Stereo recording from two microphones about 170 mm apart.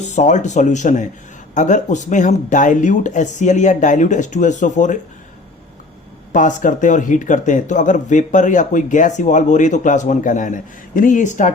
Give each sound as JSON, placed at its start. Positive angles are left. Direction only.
{"t": 0.0, "sound": "speech", "side_deg": 45}
{"t": 6.3, "sound": "speech", "side_deg": 50}